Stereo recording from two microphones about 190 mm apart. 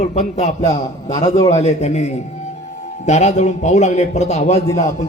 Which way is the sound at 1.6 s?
35° left (ahead or behind).